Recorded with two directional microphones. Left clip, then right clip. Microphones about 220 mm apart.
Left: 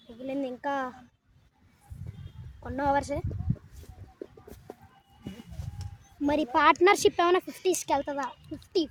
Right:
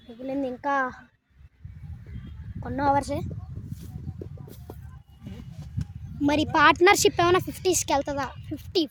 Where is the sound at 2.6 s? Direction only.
50° right (ahead or behind).